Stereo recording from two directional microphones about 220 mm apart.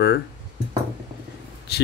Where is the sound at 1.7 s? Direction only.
45° left (ahead or behind).